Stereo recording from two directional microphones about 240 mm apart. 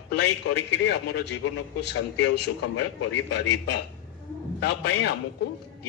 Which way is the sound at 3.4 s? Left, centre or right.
Left.